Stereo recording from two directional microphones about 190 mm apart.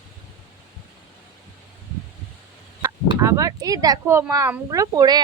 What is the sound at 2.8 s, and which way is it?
Speech, 15° right (ahead or behind).